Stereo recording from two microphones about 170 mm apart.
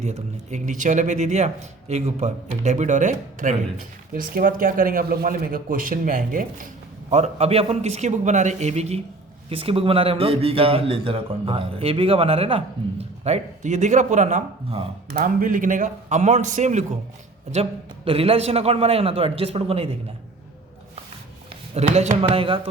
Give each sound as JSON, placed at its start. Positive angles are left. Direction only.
{"t": 0.0, "sound": "speech", "side_deg": -40}
{"t": 4.1, "sound": "speech", "side_deg": -60}
{"t": 7.1, "sound": "speech", "side_deg": -40}
{"t": 21.8, "sound": "speech", "side_deg": -40}